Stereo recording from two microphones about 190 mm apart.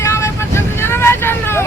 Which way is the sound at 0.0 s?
15° left (ahead or behind).